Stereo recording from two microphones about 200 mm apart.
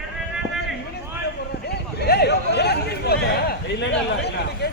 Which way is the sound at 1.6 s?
55° left (ahead or behind).